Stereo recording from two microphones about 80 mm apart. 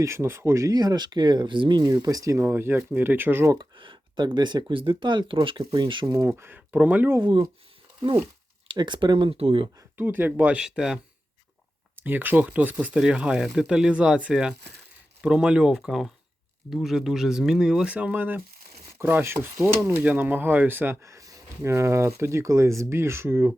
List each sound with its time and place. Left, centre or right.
0.0 s speech: right
0.7 s speech: right
1.9 s speech: right
2.4 s speech: right
3.6 s speech: right
5.7 s speech: right
6.1 s speech: right
6.3 s speech: right
7.2 s speech: right
8.6 s speech: right
10.0 s speech: right
12.0 s speech: right
17.9 s speech: right
21.0 s speech: right